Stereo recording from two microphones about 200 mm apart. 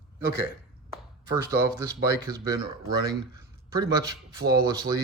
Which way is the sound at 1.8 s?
20° right (ahead or behind).